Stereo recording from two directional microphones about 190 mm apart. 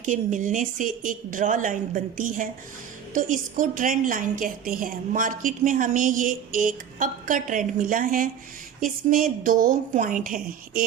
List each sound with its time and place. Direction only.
0.0 s a woman's voice: 40° right (ahead or behind)